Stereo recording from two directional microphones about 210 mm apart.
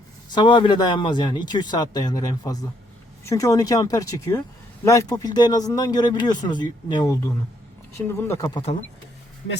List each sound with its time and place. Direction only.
0.3 s a man's voice: 20° left (ahead or behind)